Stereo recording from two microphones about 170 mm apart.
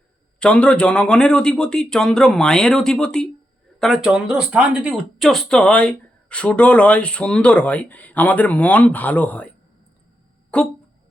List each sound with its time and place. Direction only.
0.3 s a man's voice: 5° left (ahead or behind)
10.5 s speech: 5° left (ahead or behind)